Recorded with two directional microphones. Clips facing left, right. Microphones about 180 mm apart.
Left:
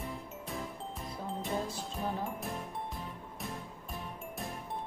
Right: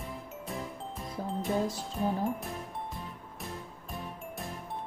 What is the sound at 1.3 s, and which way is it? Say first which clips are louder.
Speech: right 6 dB; centre (ahead or behind).